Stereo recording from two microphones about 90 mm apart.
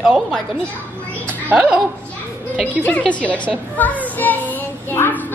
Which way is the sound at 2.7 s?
15° left (ahead or behind).